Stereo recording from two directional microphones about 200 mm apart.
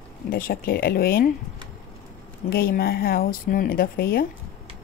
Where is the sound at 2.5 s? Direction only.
50° left (ahead or behind).